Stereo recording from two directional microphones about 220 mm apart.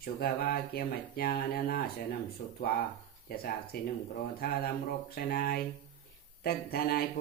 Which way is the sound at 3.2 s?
45° left (ahead or behind).